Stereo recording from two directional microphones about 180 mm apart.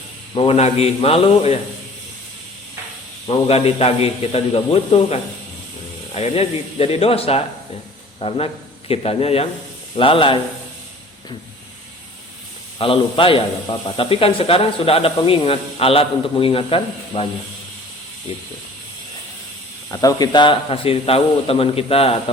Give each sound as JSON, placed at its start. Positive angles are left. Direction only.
{"t": 0.3, "sound": "speech", "side_deg": 35}
{"t": 3.2, "sound": "speech", "side_deg": 30}
{"t": 12.8, "sound": "speech", "side_deg": 30}
{"t": 18.3, "sound": "speech", "side_deg": 35}
{"t": 19.9, "sound": "speech", "side_deg": 20}